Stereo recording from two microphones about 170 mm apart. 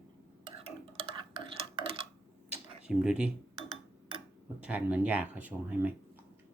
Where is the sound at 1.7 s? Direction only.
30° right (ahead or behind).